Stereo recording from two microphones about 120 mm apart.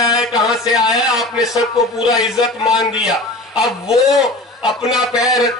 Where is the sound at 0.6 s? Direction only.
5° right (ahead or behind).